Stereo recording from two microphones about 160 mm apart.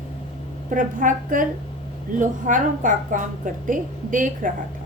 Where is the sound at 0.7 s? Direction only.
55° right (ahead or behind).